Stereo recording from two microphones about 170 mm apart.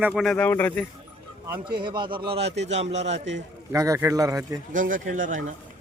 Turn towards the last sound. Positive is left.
turn(degrees=-50)  # may be behind; listen again after turning